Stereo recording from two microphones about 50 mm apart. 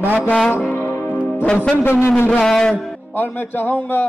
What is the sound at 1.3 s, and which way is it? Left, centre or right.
A man's voice, left.